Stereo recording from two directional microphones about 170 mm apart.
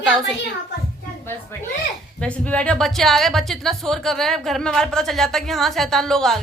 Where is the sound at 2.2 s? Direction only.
5° left (ahead or behind).